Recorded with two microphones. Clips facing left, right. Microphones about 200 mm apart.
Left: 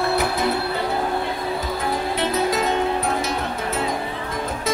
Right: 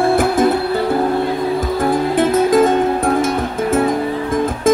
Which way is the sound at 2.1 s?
50° right (ahead or behind).